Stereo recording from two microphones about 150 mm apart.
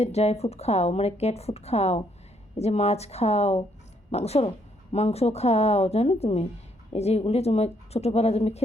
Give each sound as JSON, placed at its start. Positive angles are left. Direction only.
{"t": 0.0, "sound": "speech", "side_deg": 45}